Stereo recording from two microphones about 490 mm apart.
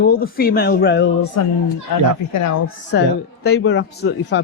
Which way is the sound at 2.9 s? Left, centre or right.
Centre.